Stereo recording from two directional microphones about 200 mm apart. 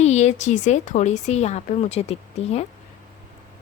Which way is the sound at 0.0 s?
35° left (ahead or behind).